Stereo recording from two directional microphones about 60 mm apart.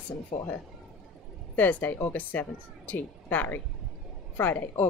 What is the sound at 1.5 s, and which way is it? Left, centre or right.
A woman's voice, left.